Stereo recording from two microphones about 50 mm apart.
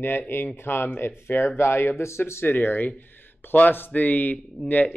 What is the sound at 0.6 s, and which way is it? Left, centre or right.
Speech, left.